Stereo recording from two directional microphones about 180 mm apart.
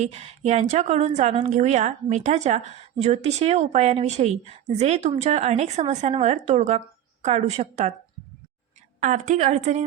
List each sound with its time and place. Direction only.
0.0 s a woman's voice: 35° right (ahead or behind)
9.0 s a woman's voice: 45° right (ahead or behind)